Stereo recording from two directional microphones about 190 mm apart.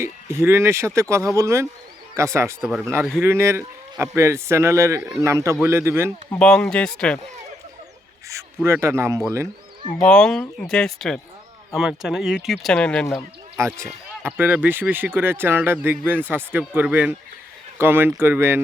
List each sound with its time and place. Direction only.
0.0 s speech: 15° right (ahead or behind)
6.4 s speech: 5° left (ahead or behind)
8.6 s speech: 15° right (ahead or behind)
10.1 s speech: 5° left (ahead or behind)
13.6 s speech: 15° right (ahead or behind)